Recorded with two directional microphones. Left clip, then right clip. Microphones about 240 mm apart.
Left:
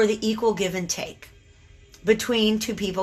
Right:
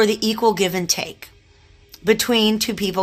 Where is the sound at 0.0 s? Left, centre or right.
Right.